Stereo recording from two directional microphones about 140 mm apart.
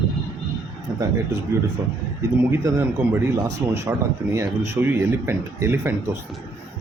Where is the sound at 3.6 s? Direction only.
20° right (ahead or behind).